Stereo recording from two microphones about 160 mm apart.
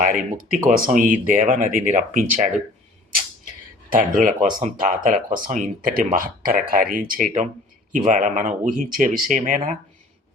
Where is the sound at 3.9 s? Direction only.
55° right (ahead or behind).